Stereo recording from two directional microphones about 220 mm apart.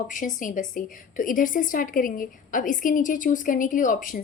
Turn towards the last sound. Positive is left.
turn(degrees=35)  # may be behind; listen again after turning